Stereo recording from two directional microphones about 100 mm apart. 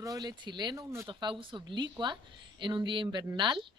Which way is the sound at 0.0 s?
40° right (ahead or behind).